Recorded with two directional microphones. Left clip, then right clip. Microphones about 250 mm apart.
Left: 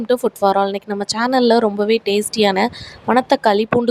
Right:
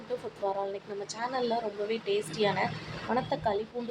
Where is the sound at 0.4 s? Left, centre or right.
Left.